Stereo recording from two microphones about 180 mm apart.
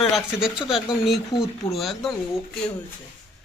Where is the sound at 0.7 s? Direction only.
30° left (ahead or behind).